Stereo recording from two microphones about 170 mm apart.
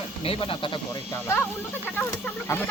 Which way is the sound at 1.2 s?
10° left (ahead or behind).